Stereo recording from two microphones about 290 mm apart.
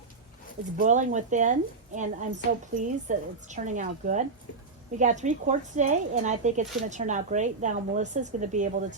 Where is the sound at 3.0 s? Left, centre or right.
Right.